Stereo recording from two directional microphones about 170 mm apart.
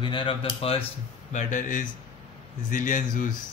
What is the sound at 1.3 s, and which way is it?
Speech, 50° left (ahead or behind).